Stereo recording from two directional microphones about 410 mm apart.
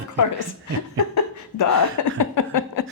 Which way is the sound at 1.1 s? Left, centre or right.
Left.